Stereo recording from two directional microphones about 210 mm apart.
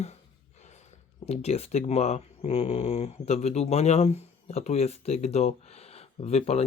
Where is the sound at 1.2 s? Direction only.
30° left (ahead or behind).